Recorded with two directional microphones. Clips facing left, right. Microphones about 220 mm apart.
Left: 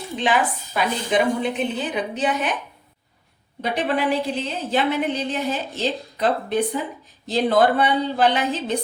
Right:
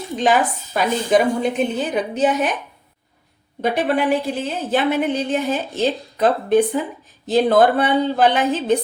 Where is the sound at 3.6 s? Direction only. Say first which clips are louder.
Right 4 dB; 45° right (ahead or behind).